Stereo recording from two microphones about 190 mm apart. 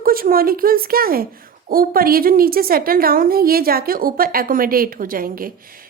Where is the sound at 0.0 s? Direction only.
50° right (ahead or behind).